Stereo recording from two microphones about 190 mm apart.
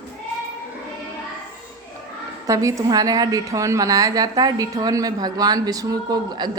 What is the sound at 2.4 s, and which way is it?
A woman's voice, 15° right (ahead or behind).